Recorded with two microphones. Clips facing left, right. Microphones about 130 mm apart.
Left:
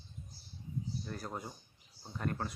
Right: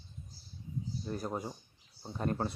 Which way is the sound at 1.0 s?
20° right (ahead or behind).